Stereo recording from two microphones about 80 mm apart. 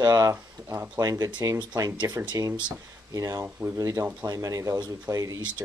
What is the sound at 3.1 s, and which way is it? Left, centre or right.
Speech, right.